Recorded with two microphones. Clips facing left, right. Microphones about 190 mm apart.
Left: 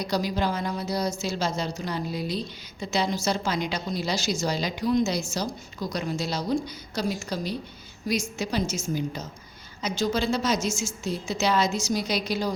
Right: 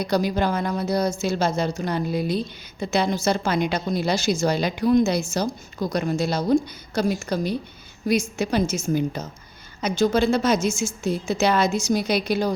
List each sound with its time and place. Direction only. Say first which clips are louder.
0.0 s a woman's voice: right 4 dB; 55° right (ahead or behind)